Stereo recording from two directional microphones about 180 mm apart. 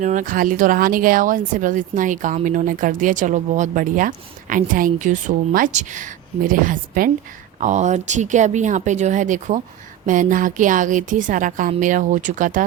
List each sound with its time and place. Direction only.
0.0 s speech: 45° right (ahead or behind)